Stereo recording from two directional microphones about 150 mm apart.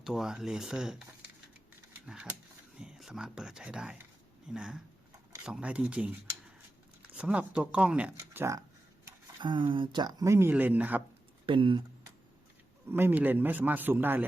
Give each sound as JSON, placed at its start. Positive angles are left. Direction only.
{"t": 0.0, "sound": "speech", "side_deg": -5}
{"t": 2.0, "sound": "a man's voice", "side_deg": -5}
{"t": 9.4, "sound": "speech", "side_deg": -30}
{"t": 11.4, "sound": "speech", "side_deg": -35}
{"t": 12.9, "sound": "a man's voice", "side_deg": -15}